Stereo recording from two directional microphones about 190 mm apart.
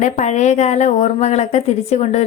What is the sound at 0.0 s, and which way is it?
A woman's voice, 40° left (ahead or behind).